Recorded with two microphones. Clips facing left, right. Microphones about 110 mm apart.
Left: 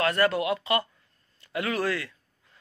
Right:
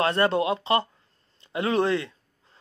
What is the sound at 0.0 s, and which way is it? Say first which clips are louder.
Speech: right 2 dB; 25° right (ahead or behind).